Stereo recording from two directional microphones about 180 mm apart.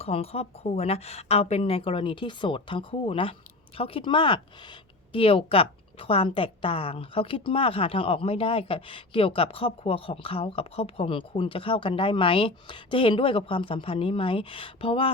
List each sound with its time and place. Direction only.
0.0 s a woman's voice: 35° left (ahead or behind)